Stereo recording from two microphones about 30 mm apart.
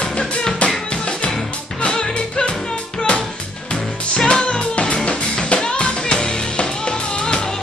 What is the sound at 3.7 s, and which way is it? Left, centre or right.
Music, left.